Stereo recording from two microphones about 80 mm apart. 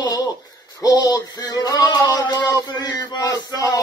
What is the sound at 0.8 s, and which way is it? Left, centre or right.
Music, left.